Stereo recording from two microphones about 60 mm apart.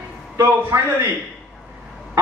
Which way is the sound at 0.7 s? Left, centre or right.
Right.